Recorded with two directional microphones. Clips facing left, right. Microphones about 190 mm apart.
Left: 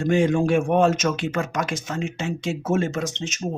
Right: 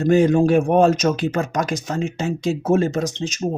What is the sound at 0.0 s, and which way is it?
Speech, 40° right (ahead or behind).